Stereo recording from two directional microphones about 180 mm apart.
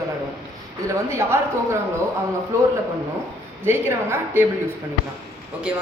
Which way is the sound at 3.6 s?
15° right (ahead or behind).